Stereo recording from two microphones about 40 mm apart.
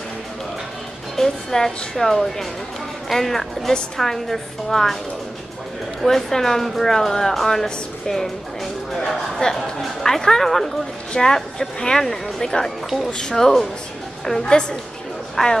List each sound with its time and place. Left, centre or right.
1.1 s speech: centre
6.0 s speech: centre
9.5 s a woman's voice: centre